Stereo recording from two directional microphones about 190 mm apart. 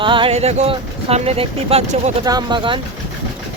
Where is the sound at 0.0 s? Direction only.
25° right (ahead or behind).